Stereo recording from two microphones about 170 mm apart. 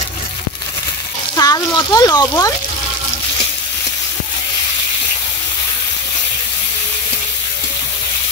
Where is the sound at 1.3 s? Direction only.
20° left (ahead or behind).